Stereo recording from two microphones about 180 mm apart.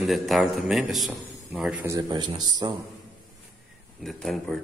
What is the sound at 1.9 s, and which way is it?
Speech, 20° right (ahead or behind).